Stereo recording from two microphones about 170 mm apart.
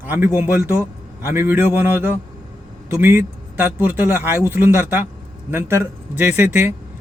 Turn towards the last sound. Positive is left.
turn(degrees=-10)  # may be behind; listen again after turning